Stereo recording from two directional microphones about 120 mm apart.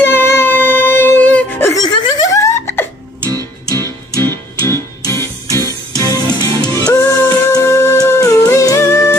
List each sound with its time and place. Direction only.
0.1 s music: 20° left (ahead or behind)
1.8 s laughter: 30° left (ahead or behind)
3.3 s music: 25° right (ahead or behind)
3.7 s music: 25° left (ahead or behind)
6.9 s music: 20° left (ahead or behind)